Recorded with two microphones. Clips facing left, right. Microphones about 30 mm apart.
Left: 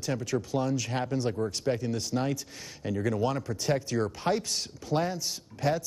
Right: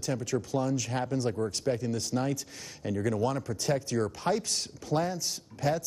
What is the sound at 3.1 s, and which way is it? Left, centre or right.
A woman's voice, left.